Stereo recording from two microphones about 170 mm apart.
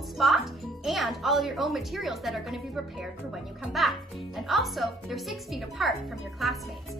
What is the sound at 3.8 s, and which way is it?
A woman's voice, centre (ahead or behind).